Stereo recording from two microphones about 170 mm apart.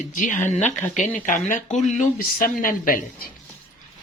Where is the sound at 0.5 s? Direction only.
10° left (ahead or behind).